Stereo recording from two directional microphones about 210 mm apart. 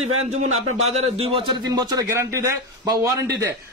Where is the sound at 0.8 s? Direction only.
30° right (ahead or behind); by 2.5 s 15° right (ahead or behind).